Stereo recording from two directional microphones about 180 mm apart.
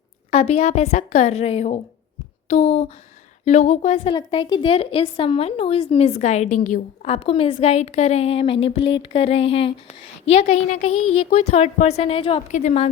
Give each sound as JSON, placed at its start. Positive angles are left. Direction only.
{"t": 0.3, "sound": "a woman's voice", "side_deg": 35}
{"t": 12.5, "sound": "a woman's voice", "side_deg": 45}